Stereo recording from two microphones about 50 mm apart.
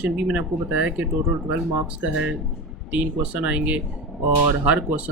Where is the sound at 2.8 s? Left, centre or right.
Right.